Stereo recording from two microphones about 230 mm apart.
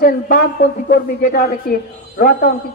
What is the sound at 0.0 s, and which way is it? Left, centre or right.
A woman's voice, left.